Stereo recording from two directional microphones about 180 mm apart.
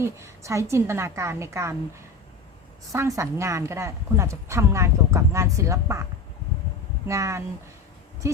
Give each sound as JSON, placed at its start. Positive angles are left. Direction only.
{"t": 0.0, "sound": "a woman's voice", "side_deg": -15}
{"t": 2.9, "sound": "a woman's voice", "side_deg": -15}
{"t": 7.1, "sound": "a woman's voice", "side_deg": -15}